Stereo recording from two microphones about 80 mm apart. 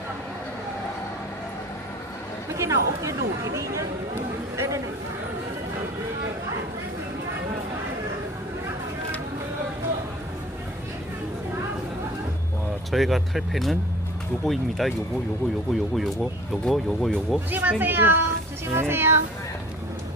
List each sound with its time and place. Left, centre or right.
2.6 s speech: right
12.9 s speech: centre
16.5 s speech: centre
17.5 s speech: right